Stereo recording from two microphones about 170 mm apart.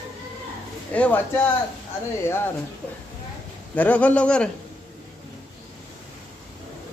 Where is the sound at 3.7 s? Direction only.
10° left (ahead or behind).